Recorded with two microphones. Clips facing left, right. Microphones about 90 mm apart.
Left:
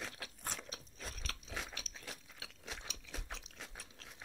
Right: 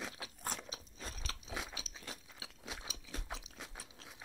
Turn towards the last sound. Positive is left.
turn(degrees=-5)  # may be behind; listen again after turning